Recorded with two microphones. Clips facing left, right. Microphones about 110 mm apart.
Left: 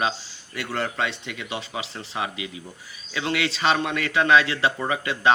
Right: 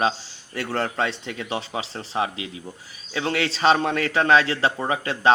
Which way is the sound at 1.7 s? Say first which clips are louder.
Right 4 dB; 25° right (ahead or behind).